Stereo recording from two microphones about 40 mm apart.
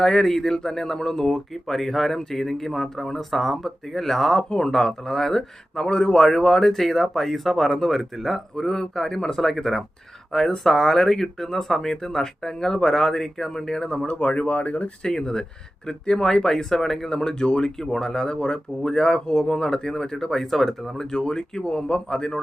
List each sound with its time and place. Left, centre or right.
0.0 s speech: centre
4.4 s speech: centre
8.5 s speech: centre
14.1 s speech: left
15.0 s speech: centre
17.2 s speech: centre
18.8 s speech: centre
21.1 s speech: centre